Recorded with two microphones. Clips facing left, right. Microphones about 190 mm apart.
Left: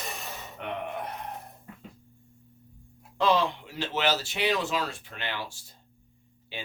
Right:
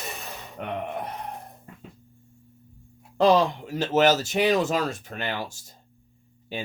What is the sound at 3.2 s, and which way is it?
Speech, 45° right (ahead or behind).